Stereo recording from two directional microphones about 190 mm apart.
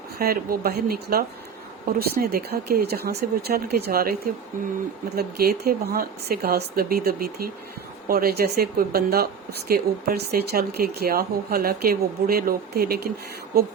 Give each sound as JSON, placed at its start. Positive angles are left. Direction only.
{"t": 0.2, "sound": "speech", "side_deg": -55}
{"t": 5.1, "sound": "speech", "side_deg": -55}